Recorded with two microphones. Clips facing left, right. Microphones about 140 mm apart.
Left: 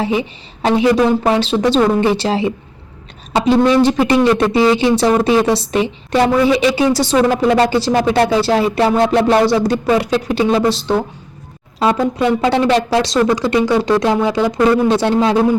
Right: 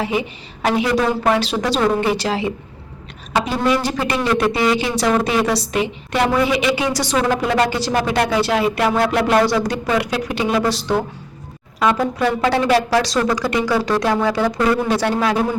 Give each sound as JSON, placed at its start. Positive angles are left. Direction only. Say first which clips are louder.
{"t": 0.0, "sound": "speech", "louder": "left 3 dB", "side_deg": 30}